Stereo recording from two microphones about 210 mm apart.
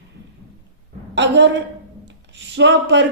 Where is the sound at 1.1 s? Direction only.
55° right (ahead or behind).